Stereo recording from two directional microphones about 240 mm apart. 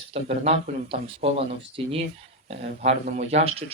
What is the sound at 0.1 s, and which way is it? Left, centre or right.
Speech, right.